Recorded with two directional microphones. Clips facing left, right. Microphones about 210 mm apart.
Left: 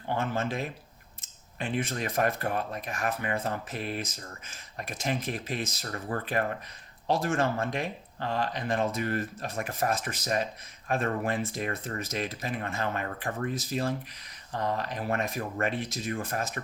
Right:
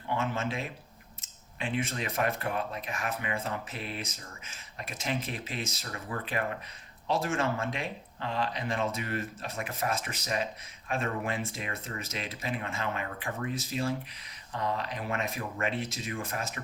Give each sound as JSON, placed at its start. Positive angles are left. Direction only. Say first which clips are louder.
{"t": 0.2, "sound": "speech", "louder": "left 4 dB", "side_deg": 40}